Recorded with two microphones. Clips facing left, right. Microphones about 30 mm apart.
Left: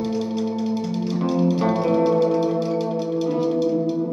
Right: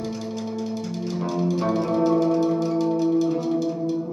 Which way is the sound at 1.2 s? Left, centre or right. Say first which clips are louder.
Left 3 dB; centre.